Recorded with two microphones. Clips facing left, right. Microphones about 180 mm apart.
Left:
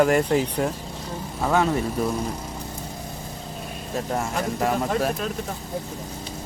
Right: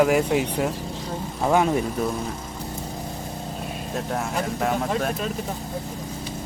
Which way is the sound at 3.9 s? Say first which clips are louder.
Left 1 dB; centre (ahead or behind).